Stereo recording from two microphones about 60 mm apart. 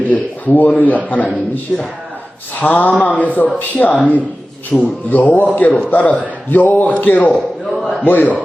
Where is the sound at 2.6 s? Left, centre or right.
Left.